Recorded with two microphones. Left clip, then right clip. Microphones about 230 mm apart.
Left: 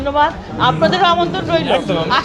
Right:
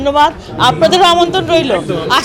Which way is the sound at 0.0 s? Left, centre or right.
Right.